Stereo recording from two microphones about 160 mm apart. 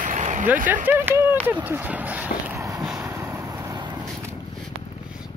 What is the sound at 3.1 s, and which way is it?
Vehicle, 15° right (ahead or behind).